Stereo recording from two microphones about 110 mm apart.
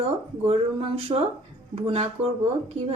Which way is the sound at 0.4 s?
55° right (ahead or behind).